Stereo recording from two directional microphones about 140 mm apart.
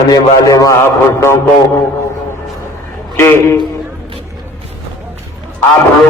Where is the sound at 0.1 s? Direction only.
25° left (ahead or behind).